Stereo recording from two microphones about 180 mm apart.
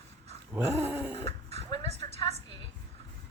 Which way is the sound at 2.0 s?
35° left (ahead or behind).